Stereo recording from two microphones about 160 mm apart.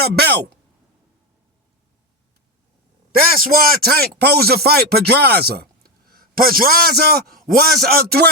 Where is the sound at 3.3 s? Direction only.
65° right (ahead or behind).